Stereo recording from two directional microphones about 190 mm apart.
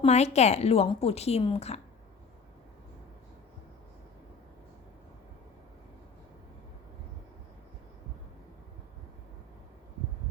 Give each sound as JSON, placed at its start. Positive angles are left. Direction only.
{"t": 0.0, "sound": "a woman's voice", "side_deg": 35}